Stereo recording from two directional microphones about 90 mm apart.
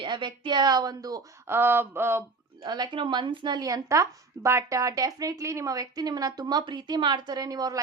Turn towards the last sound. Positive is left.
turn(degrees=-45)  # may be behind; listen again after turning